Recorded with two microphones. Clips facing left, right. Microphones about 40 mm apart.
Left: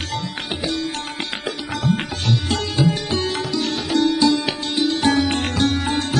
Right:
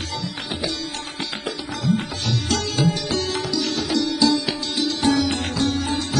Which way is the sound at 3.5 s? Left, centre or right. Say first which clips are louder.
Left 2 dB; left.